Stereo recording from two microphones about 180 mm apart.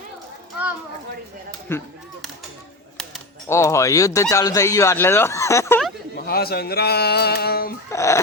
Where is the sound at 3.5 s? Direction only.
15° left (ahead or behind).